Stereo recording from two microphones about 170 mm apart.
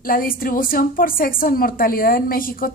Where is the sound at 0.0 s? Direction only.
55° left (ahead or behind).